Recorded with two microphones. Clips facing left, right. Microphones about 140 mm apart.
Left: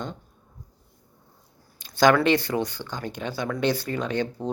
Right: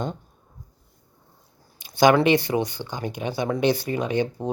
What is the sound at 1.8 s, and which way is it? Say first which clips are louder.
Speech: right 2 dB; 15° right (ahead or behind).